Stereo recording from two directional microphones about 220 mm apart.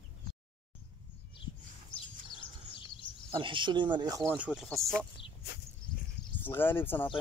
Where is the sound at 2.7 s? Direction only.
25° left (ahead or behind).